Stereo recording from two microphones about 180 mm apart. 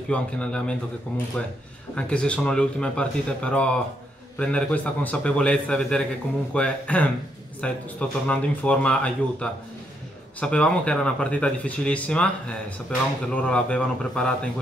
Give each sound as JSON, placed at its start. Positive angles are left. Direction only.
{"t": 0.1, "sound": "speech", "side_deg": 5}